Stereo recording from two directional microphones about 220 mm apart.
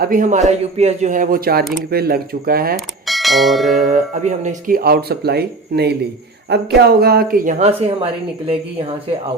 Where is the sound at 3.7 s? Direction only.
35° right (ahead or behind).